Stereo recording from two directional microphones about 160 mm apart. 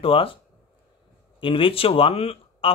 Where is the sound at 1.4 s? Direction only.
35° left (ahead or behind).